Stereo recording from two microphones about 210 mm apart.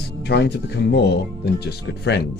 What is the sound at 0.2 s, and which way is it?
A man's voice, 50° left (ahead or behind).